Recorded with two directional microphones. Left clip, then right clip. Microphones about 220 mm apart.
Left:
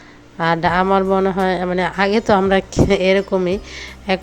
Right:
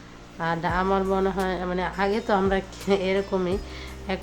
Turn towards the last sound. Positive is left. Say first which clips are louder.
# left 10 dB
turn(degrees=35)  # may be behind; listen again after turning